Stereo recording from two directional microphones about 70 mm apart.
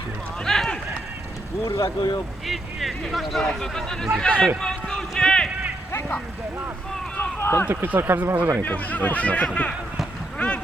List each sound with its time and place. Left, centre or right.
0.4 s run: centre
1.6 s speech: left
2.0 s speech: left
2.5 s speech: centre
4.6 s clip-clop: centre
7.2 s run: left
7.7 s speech: right
8.6 s speech: left
10.3 s a sound: centre